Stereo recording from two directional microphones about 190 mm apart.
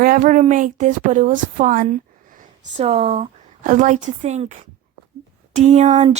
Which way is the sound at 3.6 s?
40° right (ahead or behind).